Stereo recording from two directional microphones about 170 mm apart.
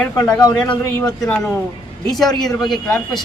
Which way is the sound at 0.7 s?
5° left (ahead or behind).